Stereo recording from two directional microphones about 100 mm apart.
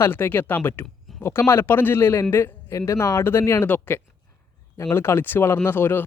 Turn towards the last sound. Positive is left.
turn(degrees=25)  # may be behind; listen again after turning